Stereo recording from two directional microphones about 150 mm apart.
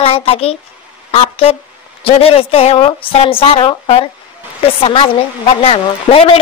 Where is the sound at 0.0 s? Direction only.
40° left (ahead or behind).